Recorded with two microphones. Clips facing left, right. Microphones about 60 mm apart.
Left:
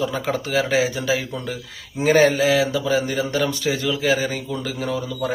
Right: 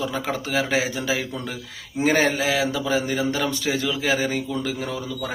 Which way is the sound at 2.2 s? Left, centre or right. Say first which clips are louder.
Left 5 dB; centre.